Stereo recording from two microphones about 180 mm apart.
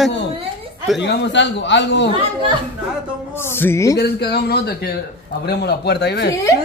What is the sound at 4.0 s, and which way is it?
A man's voice, 65° left (ahead or behind).